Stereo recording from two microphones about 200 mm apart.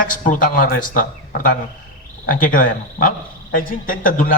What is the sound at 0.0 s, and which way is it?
A man's voice, 40° left (ahead or behind).